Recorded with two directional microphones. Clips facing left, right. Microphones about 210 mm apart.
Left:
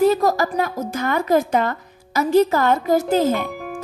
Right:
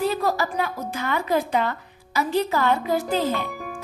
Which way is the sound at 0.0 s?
45° left (ahead or behind).